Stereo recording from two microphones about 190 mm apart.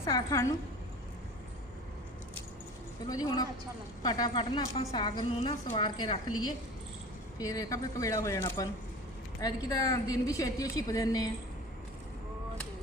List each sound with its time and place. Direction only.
0.0 s speech: 15° left (ahead or behind)
3.1 s a woman's voice: 20° left (ahead or behind)
7.3 s a woman's voice: 20° left (ahead or behind)